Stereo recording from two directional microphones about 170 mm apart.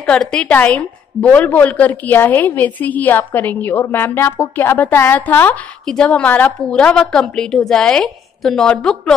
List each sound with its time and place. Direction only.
0.0 s a woman's voice: 5° left (ahead or behind)